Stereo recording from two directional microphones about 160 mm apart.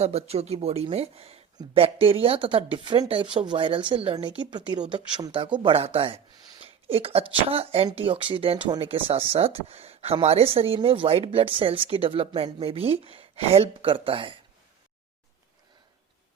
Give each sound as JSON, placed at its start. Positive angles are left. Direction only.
{"t": 0.0, "sound": "speech", "side_deg": -40}